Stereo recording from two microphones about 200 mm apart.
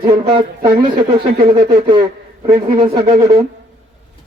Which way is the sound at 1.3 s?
25° right (ahead or behind).